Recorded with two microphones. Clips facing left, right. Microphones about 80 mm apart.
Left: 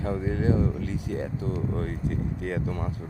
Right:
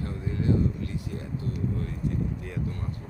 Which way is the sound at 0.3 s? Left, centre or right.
Left.